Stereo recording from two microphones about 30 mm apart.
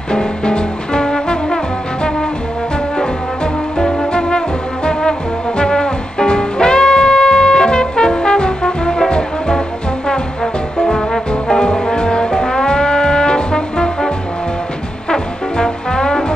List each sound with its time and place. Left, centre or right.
0.1 s music: left
3.7 s music: left
5.6 s music: left
10.4 s brass instrument: centre
15.0 s brass instrument: left